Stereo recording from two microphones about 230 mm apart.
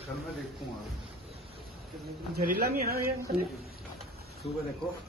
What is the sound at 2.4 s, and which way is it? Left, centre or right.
Speech, right.